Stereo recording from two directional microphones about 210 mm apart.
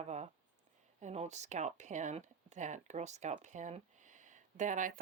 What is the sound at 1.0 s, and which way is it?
Speech, 30° right (ahead or behind).